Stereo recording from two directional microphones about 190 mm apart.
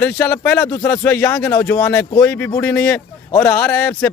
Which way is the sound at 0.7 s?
20° left (ahead or behind).